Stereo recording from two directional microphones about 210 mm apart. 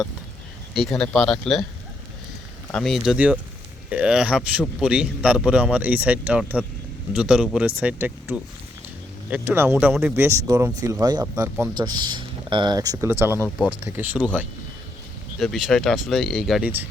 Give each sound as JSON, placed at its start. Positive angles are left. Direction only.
{"t": 0.7, "sound": "speech", "side_deg": 0}
{"t": 2.7, "sound": "speech", "side_deg": 0}
{"t": 15.4, "sound": "speech", "side_deg": 0}